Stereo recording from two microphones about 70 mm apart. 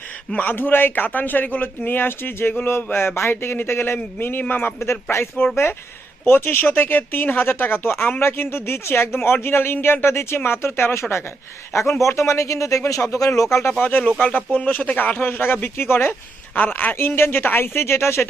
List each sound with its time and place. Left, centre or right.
0.4 s speech: left
11.7 s speech: left
14.3 s speech: left